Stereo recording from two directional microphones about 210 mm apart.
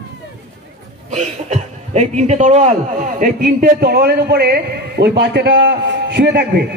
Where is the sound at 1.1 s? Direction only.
35° right (ahead or behind).